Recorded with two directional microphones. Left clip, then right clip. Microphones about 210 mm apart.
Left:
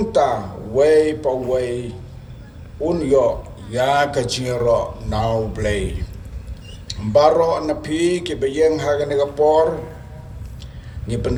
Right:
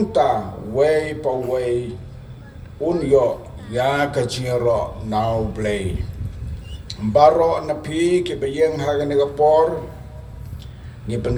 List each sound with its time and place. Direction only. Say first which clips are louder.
0.0 s a sound: left 1 dB; 40° left (ahead or behind)
0.8 s speech: left 4 dB; 40° left (ahead or behind)
11.0 s speech: left 1 dB; 40° left (ahead or behind)